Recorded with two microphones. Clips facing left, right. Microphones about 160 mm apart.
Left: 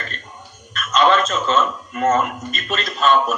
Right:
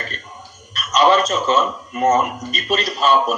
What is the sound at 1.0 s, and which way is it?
Speech, 15° right (ahead or behind).